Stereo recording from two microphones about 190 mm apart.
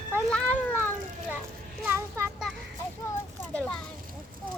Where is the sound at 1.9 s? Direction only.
15° right (ahead or behind).